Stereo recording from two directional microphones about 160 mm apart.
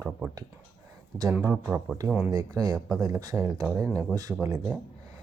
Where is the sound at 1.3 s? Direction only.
15° right (ahead or behind).